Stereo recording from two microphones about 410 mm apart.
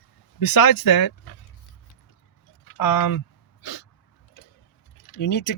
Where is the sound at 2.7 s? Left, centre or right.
Left.